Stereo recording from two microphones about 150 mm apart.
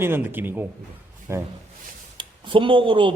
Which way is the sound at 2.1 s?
35° right (ahead or behind).